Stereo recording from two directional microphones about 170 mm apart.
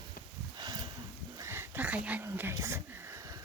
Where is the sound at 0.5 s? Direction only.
25° right (ahead or behind).